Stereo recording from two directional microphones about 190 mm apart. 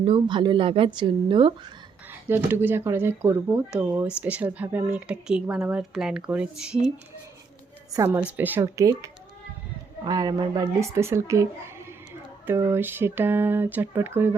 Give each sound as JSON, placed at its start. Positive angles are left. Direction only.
{"t": 0.0, "sound": "speech", "side_deg": -25}
{"t": 2.3, "sound": "speech", "side_deg": -10}
{"t": 7.9, "sound": "speech", "side_deg": -15}
{"t": 12.5, "sound": "speech", "side_deg": -15}